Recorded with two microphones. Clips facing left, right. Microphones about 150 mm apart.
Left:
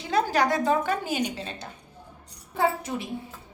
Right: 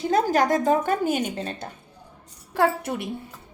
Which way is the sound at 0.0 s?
45° right (ahead or behind).